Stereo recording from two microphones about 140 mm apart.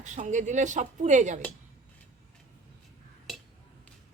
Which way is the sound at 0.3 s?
60° right (ahead or behind).